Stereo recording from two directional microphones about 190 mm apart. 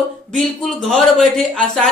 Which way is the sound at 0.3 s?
Centre (ahead or behind).